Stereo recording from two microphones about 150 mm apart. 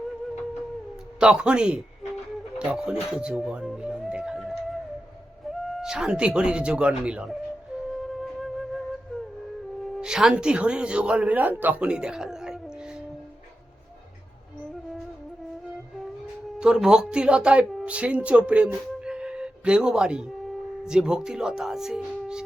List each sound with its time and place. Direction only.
1.2 s speech: 5° right (ahead or behind)
8.0 s flute: centre (ahead or behind)
10.0 s a man's voice: 5° right (ahead or behind)
16.6 s speech: 5° right (ahead or behind)